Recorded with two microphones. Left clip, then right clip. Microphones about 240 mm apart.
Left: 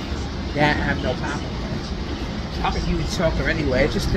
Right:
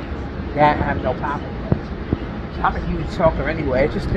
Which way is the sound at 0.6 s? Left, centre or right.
Centre.